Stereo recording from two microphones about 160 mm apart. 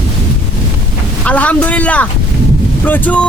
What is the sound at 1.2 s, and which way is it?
Speech, 10° left (ahead or behind).